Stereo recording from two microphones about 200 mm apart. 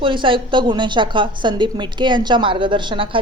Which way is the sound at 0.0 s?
25° right (ahead or behind).